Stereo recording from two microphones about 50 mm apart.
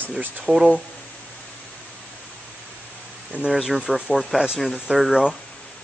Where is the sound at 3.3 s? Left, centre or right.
Right; by 5.2 s centre.